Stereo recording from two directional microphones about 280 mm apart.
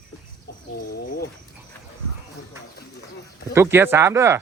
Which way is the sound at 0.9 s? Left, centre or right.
Left.